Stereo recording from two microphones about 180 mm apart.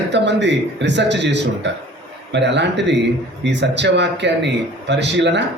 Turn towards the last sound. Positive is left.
turn(degrees=-75)  # may be behind; listen again after turning